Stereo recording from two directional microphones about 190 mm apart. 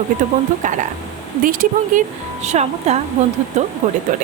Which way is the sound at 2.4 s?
35° right (ahead or behind).